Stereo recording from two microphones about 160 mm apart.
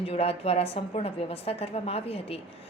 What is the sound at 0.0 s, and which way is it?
A woman's voice, 40° left (ahead or behind).